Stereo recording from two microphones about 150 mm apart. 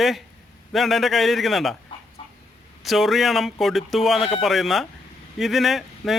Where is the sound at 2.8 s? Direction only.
Centre (ahead or behind).